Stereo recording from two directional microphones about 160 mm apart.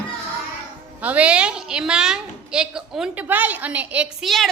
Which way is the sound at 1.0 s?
10° right (ahead or behind).